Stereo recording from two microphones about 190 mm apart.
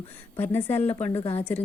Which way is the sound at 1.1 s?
30° left (ahead or behind).